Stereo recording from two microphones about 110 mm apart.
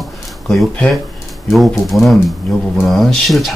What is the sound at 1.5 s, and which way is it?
Speech, centre (ahead or behind).